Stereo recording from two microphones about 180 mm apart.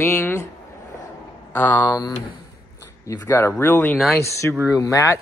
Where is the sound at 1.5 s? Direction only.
10° left (ahead or behind).